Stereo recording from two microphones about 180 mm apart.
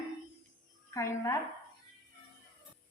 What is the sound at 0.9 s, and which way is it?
Speech, 15° left (ahead or behind).